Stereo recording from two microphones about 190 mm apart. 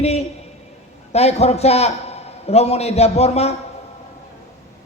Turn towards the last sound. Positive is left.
turn(degrees=35)  # may be behind; listen again after turning